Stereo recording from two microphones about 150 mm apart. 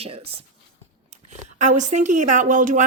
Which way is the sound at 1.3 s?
55° right (ahead or behind).